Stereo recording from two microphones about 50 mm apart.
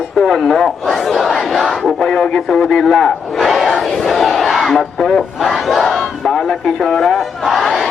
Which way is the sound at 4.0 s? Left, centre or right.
Centre.